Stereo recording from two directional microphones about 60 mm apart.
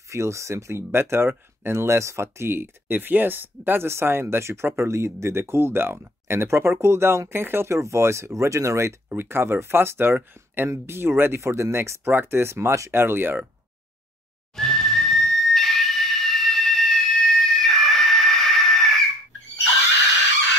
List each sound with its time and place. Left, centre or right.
0.1 s speech: right
12.9 s speech: right
14.5 s whistle: centre
15.1 s a sound: centre